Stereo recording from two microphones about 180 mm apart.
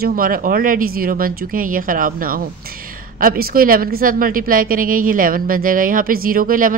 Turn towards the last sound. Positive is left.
turn(degrees=-50)  # may be behind; listen again after turning